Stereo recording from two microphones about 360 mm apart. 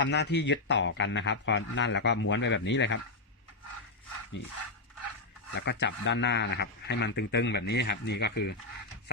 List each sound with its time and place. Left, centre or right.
0.0 s speech: left
5.5 s speech: left